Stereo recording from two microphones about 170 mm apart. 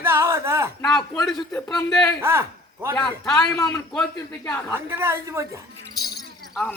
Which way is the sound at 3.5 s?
20° left (ahead or behind).